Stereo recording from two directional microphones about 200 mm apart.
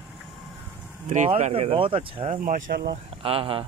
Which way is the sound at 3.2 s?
25° right (ahead or behind).